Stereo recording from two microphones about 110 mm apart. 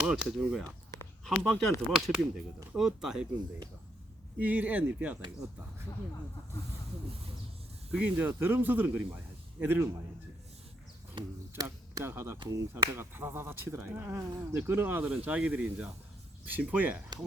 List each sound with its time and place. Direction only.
0.0 s speech: 5° right (ahead or behind)
4.4 s speech: 15° right (ahead or behind)
7.9 s speech: 15° right (ahead or behind)
11.1 s a sound: 40° right (ahead or behind)
12.0 s speech: 20° right (ahead or behind)